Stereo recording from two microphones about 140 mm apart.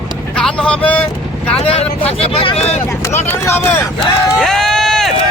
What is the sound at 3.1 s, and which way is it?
Speech, 15° left (ahead or behind).